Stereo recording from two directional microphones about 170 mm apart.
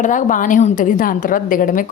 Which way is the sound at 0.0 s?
50° left (ahead or behind).